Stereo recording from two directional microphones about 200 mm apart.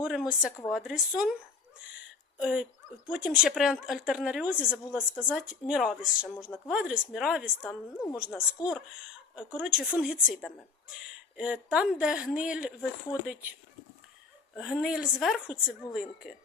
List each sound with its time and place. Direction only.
0.0 s a woman's voice: 5° right (ahead or behind)
2.4 s a woman's voice: 5° right (ahead or behind)
8.6 s speech: 20° left (ahead or behind)
9.3 s a woman's voice: 5° right (ahead or behind)
14.5 s a woman's voice: centre (ahead or behind)